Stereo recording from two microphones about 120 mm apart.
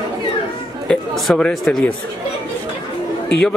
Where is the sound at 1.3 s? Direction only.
Centre (ahead or behind).